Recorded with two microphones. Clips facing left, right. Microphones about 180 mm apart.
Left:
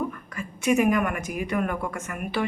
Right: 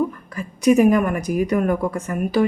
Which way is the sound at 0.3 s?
35° right (ahead or behind).